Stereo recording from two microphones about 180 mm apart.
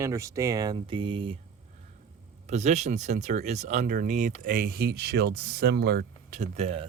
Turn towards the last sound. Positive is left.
turn(degrees=-35)  # may be behind; listen again after turning